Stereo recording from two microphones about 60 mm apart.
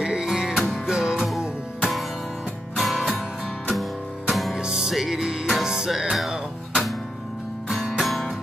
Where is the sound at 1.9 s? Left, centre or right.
Centre.